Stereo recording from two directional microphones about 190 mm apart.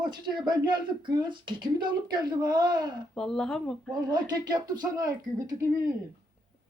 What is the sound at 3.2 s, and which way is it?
Speech, 5° left (ahead or behind).